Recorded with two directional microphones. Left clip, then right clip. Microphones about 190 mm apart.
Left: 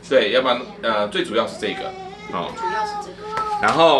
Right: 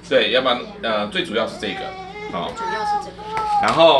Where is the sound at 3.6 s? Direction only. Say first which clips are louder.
Right 1 dB; 40° left (ahead or behind).